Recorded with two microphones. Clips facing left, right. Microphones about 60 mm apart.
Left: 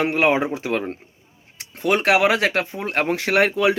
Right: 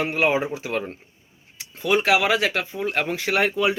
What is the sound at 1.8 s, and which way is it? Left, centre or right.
Speech, left.